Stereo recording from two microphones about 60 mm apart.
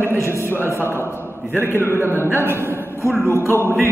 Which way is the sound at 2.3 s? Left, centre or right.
Right.